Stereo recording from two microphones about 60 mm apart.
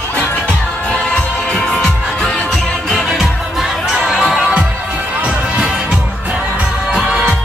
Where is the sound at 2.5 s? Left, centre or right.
Centre.